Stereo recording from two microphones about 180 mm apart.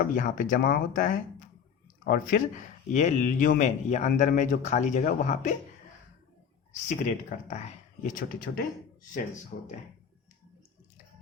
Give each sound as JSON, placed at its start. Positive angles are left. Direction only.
{"t": 0.0, "sound": "speech", "side_deg": 45}
{"t": 2.9, "sound": "speech", "side_deg": 40}
{"t": 6.8, "sound": "speech", "side_deg": 40}